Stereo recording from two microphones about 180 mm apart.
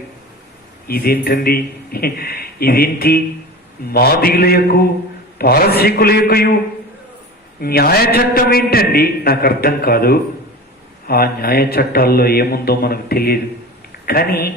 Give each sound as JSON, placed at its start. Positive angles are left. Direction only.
{"t": 0.9, "sound": "a man's voice", "side_deg": 55}
{"t": 7.6, "sound": "a man's voice", "side_deg": 60}